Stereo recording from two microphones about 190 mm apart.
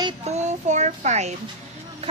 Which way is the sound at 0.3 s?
35° right (ahead or behind).